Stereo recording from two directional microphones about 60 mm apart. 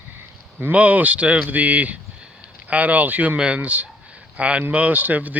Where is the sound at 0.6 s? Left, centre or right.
Right.